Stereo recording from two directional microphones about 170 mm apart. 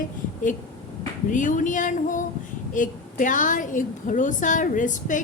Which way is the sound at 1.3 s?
50° left (ahead or behind).